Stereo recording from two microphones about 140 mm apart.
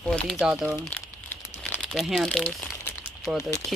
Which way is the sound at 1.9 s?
Centre (ahead or behind).